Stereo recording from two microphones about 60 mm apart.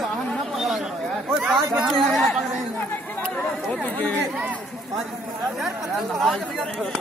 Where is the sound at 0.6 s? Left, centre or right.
Centre.